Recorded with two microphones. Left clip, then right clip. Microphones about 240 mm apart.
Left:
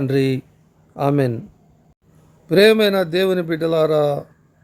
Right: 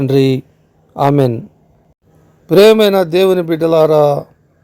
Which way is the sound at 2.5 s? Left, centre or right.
Right.